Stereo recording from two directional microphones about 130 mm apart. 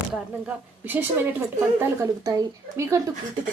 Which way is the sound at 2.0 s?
25° right (ahead or behind).